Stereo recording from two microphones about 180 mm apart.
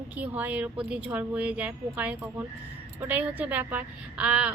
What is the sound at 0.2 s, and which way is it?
A woman's voice, 10° right (ahead or behind).